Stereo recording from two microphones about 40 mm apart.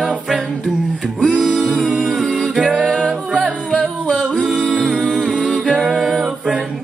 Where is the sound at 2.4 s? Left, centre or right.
Centre.